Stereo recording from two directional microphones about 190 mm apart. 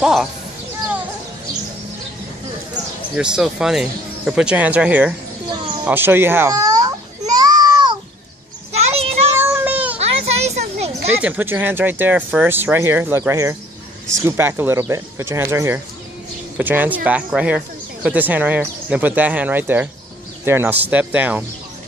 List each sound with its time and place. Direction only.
0.0 s speech: centre (ahead or behind)
3.2 s speech: 5° right (ahead or behind)
5.9 s babbling: 10° right (ahead or behind)
8.9 s child singing: 30° right (ahead or behind)
9.4 s child singing: 10° right (ahead or behind)
9.9 s children playing: 35° right (ahead or behind)
11.1 s speech: 10° right (ahead or behind)